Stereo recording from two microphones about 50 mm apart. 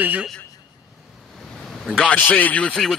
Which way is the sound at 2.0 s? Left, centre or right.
Left.